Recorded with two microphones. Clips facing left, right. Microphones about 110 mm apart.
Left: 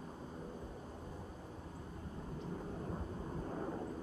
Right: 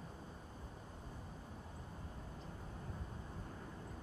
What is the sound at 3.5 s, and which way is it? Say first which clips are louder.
Vehicle: left 11 dB; 60° left (ahead or behind).